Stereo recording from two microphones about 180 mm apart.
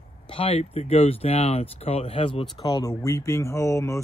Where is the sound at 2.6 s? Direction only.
20° left (ahead or behind).